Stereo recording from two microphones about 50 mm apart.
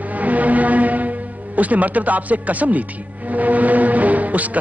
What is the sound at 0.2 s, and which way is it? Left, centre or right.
Music, right.